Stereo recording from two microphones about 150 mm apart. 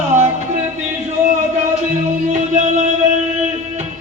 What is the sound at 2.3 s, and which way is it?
Music, 50° right (ahead or behind).